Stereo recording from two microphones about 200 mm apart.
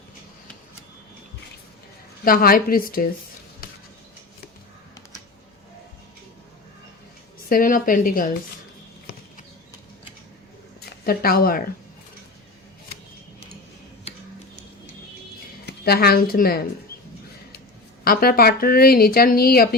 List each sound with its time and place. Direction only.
2.2 s a woman's voice: 45° left (ahead or behind)
7.5 s a woman's voice: 45° left (ahead or behind)
10.8 s speech: 50° left (ahead or behind)
15.6 s a woman's voice: 50° left (ahead or behind)
18.0 s a woman's voice: 50° left (ahead or behind)